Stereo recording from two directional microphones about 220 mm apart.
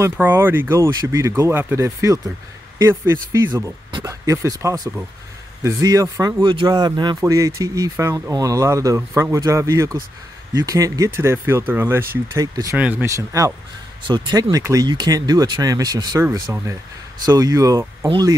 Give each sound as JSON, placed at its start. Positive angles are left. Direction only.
{"t": 0.0, "sound": "speech", "side_deg": -10}